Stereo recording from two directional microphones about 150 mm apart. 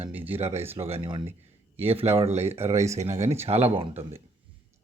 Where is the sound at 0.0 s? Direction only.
10° right (ahead or behind).